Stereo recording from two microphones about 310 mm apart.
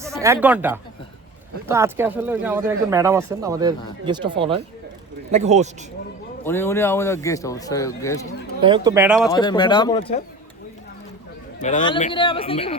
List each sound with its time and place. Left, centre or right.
0.0 s speech: centre
6.4 s speech: centre
8.6 s speech: centre
9.3 s speech: centre
11.6 s speech: centre